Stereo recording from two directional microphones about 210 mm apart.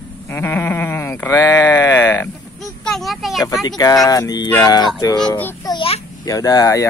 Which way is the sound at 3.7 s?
15° left (ahead or behind).